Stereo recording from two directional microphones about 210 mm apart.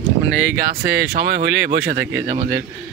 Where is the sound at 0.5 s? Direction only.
45° right (ahead or behind).